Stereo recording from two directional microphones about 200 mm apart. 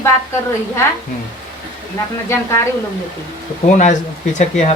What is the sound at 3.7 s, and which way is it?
Speech, 35° left (ahead or behind).